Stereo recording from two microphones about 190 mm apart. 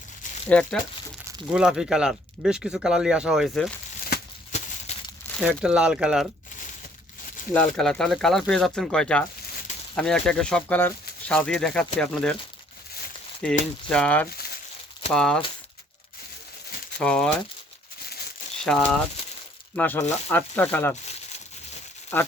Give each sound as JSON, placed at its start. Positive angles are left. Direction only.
{"t": 0.4, "sound": "speech", "side_deg": 5}
{"t": 4.9, "sound": "crumpling", "side_deg": 35}
{"t": 5.2, "sound": "crumpling", "side_deg": 10}
{"t": 5.6, "sound": "speech", "side_deg": -5}
{"t": 7.5, "sound": "speech", "side_deg": 5}
{"t": 13.4, "sound": "speech", "side_deg": 5}
{"t": 17.0, "sound": "speech", "side_deg": 5}
{"t": 18.6, "sound": "speech", "side_deg": 5}
{"t": 20.9, "sound": "crumpling", "side_deg": 35}
{"t": 22.1, "sound": "speech", "side_deg": 15}